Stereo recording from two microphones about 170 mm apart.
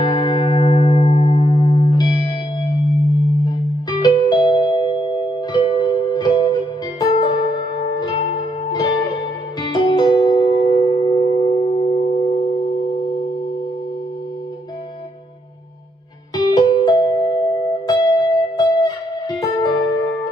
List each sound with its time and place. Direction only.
0.0 s music: 25° left (ahead or behind)
3.4 s music: 25° left (ahead or behind)
16.3 s music: 25° left (ahead or behind)